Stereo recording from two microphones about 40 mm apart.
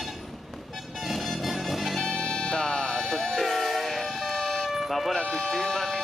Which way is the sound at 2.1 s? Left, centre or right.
Centre.